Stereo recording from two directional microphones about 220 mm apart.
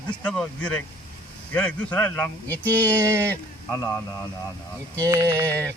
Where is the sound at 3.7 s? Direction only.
15° left (ahead or behind).